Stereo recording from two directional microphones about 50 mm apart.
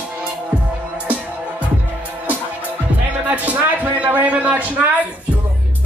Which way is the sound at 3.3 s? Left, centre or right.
Right.